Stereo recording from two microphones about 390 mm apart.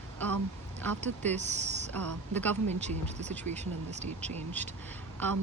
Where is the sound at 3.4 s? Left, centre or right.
Centre.